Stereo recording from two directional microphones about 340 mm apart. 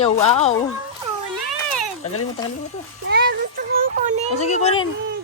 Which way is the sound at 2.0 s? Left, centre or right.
Left.